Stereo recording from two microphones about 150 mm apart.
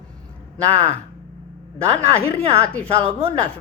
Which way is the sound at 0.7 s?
45° right (ahead or behind).